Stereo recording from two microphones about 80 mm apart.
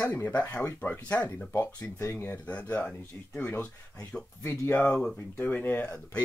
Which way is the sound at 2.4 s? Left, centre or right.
Centre.